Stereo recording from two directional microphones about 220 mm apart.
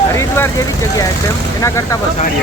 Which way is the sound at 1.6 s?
15° left (ahead or behind).